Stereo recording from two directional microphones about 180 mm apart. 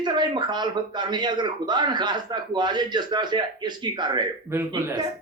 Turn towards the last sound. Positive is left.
turn(degrees=-20)  # may be behind; listen again after turning